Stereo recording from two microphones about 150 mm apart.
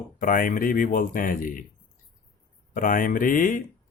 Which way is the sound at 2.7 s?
65° left (ahead or behind).